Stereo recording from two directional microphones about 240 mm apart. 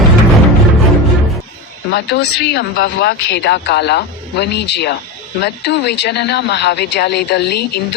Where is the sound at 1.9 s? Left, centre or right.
Left.